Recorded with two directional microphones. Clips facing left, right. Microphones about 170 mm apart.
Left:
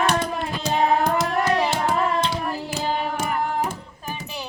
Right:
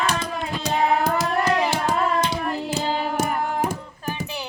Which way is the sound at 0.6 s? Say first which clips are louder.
Left 1 dB; 5° right (ahead or behind).